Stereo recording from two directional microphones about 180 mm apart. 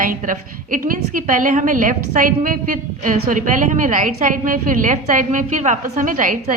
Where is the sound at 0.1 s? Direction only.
50° right (ahead or behind).